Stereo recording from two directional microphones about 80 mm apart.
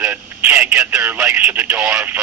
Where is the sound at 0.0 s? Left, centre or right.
Right.